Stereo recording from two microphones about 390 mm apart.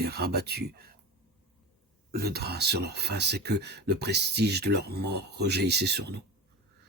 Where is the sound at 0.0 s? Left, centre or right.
Right.